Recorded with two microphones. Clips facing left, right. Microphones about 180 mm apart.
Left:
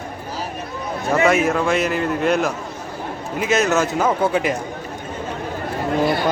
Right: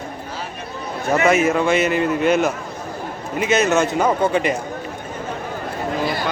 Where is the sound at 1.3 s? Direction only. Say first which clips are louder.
Right 1 dB; centre (ahead or behind).